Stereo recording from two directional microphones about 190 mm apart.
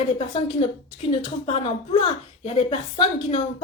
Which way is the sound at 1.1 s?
30° left (ahead or behind).